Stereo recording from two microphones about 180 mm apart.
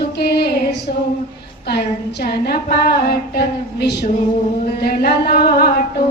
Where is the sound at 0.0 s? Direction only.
65° left (ahead or behind).